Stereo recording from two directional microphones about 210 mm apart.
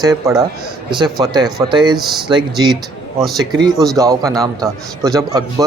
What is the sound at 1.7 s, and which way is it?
Speech, 20° right (ahead or behind).